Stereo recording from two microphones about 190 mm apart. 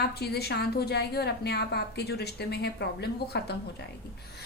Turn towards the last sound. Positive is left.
turn(degrees=60)  # may be behind; listen again after turning